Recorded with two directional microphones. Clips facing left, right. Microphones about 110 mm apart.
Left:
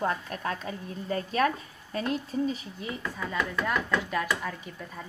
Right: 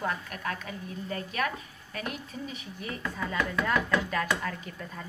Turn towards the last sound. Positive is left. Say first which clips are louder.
# even
turn(degrees=5)  # may be behind; listen again after turning